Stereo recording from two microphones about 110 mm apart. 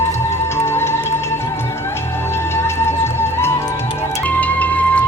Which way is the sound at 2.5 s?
25° left (ahead or behind).